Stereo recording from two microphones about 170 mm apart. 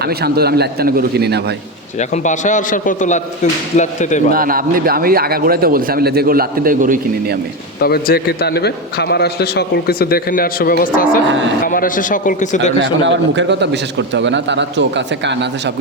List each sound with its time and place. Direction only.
0.0 s a man's voice: 70° right (ahead or behind)
2.0 s a man's voice: 45° left (ahead or behind)
4.3 s a man's voice: 55° right (ahead or behind)
7.8 s a man's voice: 65° left (ahead or behind); by 12.7 s 45° left (ahead or behind)
12.8 s a man's voice: 90° right